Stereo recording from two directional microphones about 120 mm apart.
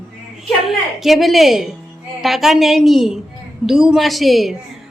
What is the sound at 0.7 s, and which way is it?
A woman's voice, centre (ahead or behind).